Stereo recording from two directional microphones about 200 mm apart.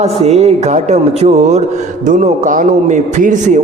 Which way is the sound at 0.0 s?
30° right (ahead or behind).